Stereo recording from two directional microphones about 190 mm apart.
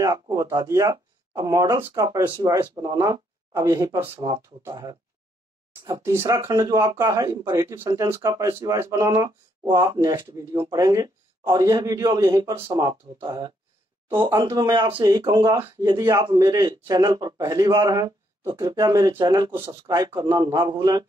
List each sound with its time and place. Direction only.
0.0 s speech: 15° right (ahead or behind)